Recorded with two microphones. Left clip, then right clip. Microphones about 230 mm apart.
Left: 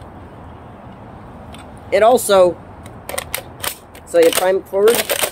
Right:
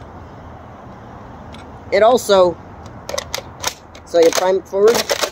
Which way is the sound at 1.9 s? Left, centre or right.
Centre.